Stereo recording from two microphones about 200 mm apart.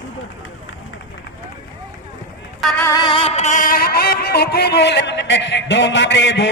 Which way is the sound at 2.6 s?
5° left (ahead or behind).